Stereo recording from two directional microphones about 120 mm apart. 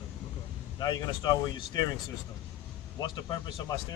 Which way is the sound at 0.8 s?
35° left (ahead or behind).